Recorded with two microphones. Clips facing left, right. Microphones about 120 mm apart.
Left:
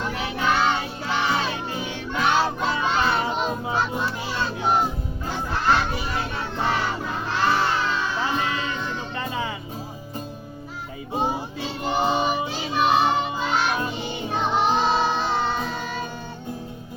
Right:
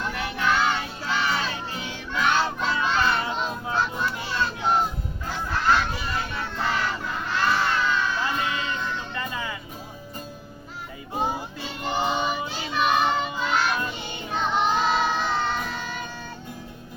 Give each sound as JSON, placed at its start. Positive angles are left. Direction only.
{"t": 0.0, "sound": "music", "side_deg": 20}
{"t": 5.3, "sound": "honk", "side_deg": 25}
{"t": 5.9, "sound": "music", "side_deg": 25}
{"t": 11.1, "sound": "child singing", "side_deg": 20}
{"t": 13.5, "sound": "music", "side_deg": 15}
{"t": 14.8, "sound": "music", "side_deg": 25}